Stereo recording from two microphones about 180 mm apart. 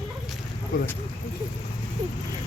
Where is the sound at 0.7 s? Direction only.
50° left (ahead or behind).